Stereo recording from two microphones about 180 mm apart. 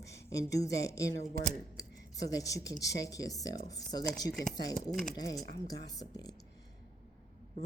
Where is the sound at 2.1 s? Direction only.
20° left (ahead or behind).